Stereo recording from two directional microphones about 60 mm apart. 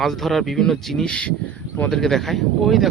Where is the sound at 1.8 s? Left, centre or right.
Centre.